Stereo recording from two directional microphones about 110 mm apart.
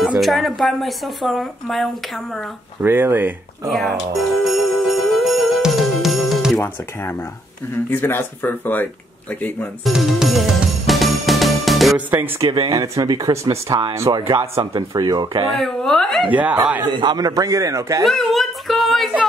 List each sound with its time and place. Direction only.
0.2 s speech: centre (ahead or behind)
2.8 s speech: 20° right (ahead or behind)
3.7 s jingle bell: centre (ahead or behind)
6.6 s speech: 20° left (ahead or behind)
9.8 s music: centre (ahead or behind)
12.1 s speech: 20° right (ahead or behind)
12.4 s a man's voice: 40° right (ahead or behind); by 14.6 s 25° right (ahead or behind)
14.6 s a man's voice: 40° right (ahead or behind)
15.5 s speech: 5° left (ahead or behind)
16.3 s speech: 15° right (ahead or behind)
16.9 s a man's voice: 40° right (ahead or behind)
18.0 s a sound: centre (ahead or behind)